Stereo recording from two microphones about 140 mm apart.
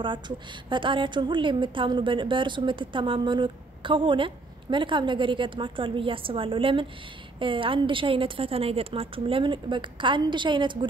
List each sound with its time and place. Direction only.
0.7 s a woman's voice: 35° right (ahead or behind)